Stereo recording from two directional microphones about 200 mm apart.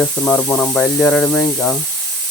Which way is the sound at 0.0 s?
10° left (ahead or behind).